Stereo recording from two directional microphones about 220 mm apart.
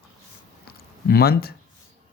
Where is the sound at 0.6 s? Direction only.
45° left (ahead or behind).